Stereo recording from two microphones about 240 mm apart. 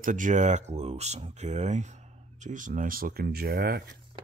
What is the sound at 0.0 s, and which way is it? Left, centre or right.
Speech, right.